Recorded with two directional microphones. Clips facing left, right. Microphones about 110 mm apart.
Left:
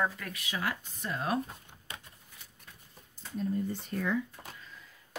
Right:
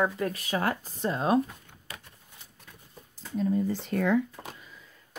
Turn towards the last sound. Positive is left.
turn(degrees=-80)